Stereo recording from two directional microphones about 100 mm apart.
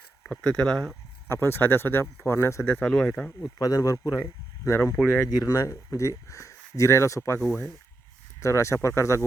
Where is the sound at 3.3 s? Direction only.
30° left (ahead or behind).